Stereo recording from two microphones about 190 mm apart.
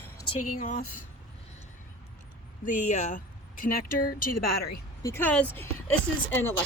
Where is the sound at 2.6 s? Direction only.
40° left (ahead or behind).